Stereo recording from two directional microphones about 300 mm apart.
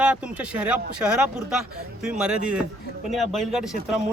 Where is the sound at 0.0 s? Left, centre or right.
Centre.